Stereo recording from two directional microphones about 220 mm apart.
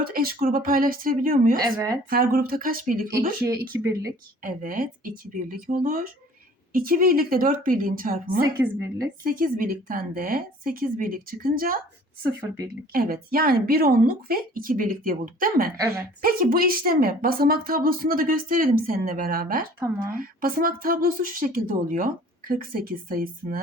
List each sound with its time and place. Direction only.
0.0 s speech: 40° right (ahead or behind)
3.4 s speech: 15° right (ahead or behind)
4.4 s speech: 40° right (ahead or behind)
8.6 s speech: 5° right (ahead or behind)
9.2 s speech: 40° right (ahead or behind)
12.9 s speech: 40° right (ahead or behind)